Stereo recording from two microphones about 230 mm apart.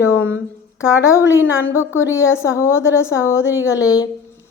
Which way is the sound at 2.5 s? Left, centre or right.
Centre.